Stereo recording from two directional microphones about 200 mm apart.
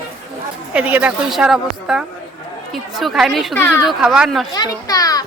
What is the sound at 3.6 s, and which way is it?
Speech, 10° left (ahead or behind).